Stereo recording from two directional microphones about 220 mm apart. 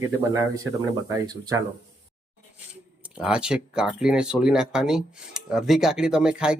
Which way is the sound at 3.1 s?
5° right (ahead or behind).